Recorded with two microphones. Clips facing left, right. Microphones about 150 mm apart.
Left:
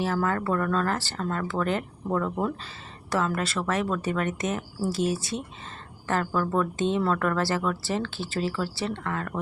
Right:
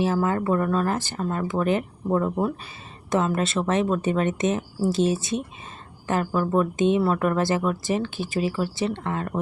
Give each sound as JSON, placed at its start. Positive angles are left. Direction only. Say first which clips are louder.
{"t": 0.0, "sound": "a woman's voice", "louder": "right 4 dB", "side_deg": -20}